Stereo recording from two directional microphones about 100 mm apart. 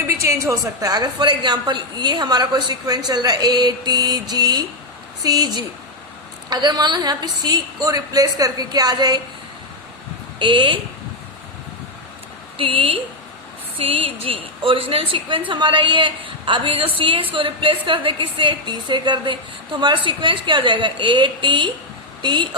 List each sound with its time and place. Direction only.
0.2 s a woman's voice: 30° right (ahead or behind)
10.4 s a woman's voice: 55° right (ahead or behind)
12.5 s a woman's voice: 65° right (ahead or behind)